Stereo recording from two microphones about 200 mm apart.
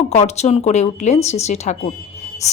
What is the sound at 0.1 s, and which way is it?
Speech, 35° left (ahead or behind).